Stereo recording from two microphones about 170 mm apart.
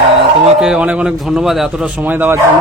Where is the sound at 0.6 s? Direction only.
5° right (ahead or behind).